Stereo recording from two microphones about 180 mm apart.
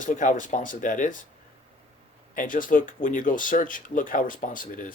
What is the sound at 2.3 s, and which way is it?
Speech, 50° left (ahead or behind).